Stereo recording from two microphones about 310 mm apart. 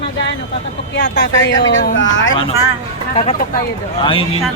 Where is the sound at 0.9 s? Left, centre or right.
Left.